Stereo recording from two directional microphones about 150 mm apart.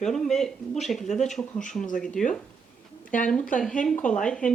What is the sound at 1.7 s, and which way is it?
Speech, 20° left (ahead or behind).